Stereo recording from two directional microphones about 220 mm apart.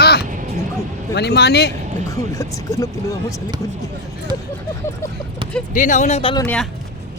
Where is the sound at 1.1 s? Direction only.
50° left (ahead or behind).